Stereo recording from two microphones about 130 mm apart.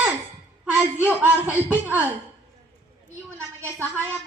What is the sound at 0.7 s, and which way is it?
A woman's voice, 15° right (ahead or behind).